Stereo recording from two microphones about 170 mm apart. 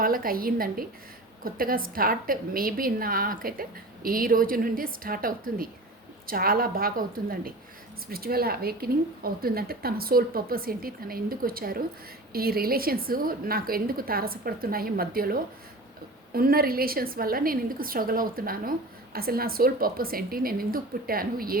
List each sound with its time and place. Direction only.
0.0 s a woman's voice: 55° right (ahead or behind)